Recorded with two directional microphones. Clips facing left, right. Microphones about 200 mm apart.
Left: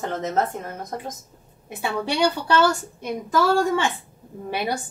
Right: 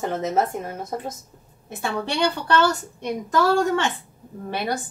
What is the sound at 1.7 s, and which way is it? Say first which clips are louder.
Speech: left 1 dB; 10° left (ahead or behind).